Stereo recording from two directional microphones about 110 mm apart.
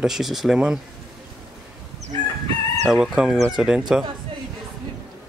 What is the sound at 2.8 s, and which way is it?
Speech, 5° right (ahead or behind).